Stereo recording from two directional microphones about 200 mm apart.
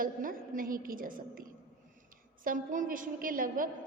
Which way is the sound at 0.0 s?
45° right (ahead or behind).